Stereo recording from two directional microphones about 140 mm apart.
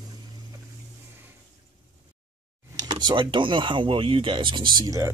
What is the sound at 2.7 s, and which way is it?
Speech, 35° right (ahead or behind).